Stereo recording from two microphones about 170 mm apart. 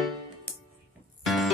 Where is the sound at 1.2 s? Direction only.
Centre (ahead or behind).